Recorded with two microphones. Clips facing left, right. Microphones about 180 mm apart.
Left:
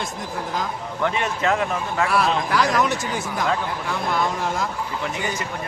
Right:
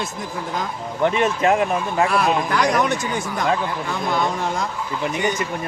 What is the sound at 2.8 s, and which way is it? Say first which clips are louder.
Speech: right 2 dB; 5° left (ahead or behind).